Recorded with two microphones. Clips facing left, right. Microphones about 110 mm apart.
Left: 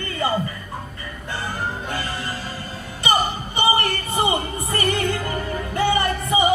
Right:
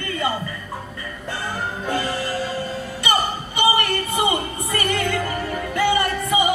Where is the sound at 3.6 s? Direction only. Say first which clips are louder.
Right 1 dB; 30° left (ahead or behind).